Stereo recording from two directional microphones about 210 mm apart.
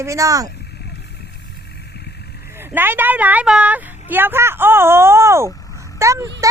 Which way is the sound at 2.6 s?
10° right (ahead or behind).